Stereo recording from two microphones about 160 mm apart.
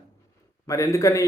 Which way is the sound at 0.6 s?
20° left (ahead or behind).